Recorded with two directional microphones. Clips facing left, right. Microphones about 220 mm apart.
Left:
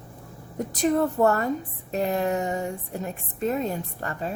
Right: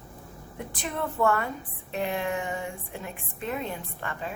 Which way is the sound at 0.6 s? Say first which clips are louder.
Left 10 dB; 40° left (ahead or behind).